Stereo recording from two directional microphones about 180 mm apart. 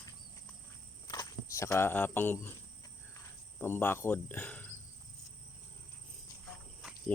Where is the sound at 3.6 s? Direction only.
10° left (ahead or behind).